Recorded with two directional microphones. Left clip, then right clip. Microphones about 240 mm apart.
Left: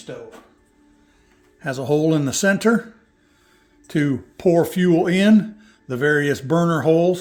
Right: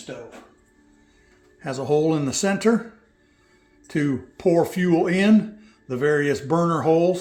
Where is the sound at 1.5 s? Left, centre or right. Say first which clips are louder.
Left 1 dB; left.